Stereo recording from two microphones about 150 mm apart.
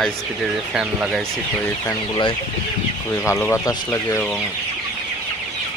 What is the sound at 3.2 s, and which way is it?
Chicken, 15° left (ahead or behind).